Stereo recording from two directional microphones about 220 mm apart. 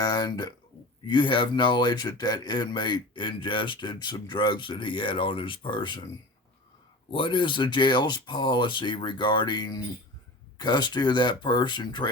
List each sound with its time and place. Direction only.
0.0 s speech: 20° left (ahead or behind)
7.1 s speech: 20° left (ahead or behind)